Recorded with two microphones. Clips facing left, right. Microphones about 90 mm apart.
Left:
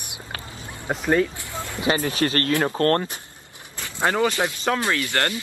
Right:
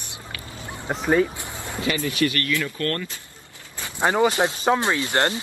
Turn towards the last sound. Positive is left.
turn(degrees=-25)  # may be behind; listen again after turning